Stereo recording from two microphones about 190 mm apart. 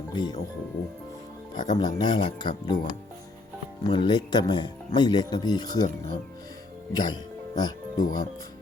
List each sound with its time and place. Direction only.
0.1 s speech: 25° left (ahead or behind)
1.5 s speech: 40° left (ahead or behind)
1.8 s speech: 25° left (ahead or behind)
3.8 s speech: 25° left (ahead or behind)